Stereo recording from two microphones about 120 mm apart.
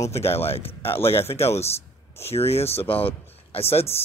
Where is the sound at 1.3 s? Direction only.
55° left (ahead or behind).